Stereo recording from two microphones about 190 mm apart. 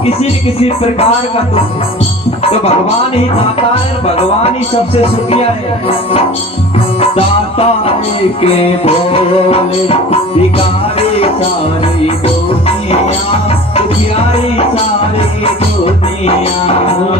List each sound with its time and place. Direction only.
0.0 s music: 30° left (ahead or behind)
2.4 s speech: 30° left (ahead or behind)
4.0 s music: 30° left (ahead or behind)
12.0 s music: 30° left (ahead or behind)
15.8 s music: 30° left (ahead or behind)